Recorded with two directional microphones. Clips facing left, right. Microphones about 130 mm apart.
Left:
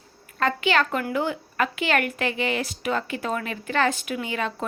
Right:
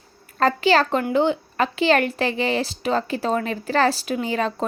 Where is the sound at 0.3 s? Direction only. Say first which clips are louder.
Right 5 dB; 35° right (ahead or behind).